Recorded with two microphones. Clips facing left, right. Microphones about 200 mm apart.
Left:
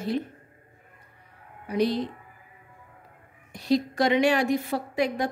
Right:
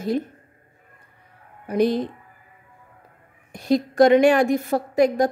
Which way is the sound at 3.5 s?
50° right (ahead or behind).